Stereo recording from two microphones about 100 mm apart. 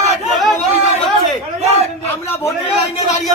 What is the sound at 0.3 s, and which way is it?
Chatter, centre (ahead or behind).